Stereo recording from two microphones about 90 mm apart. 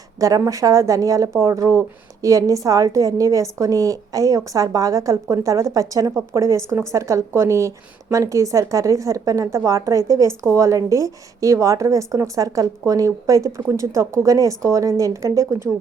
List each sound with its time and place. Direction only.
0.2 s speech: 40° right (ahead or behind)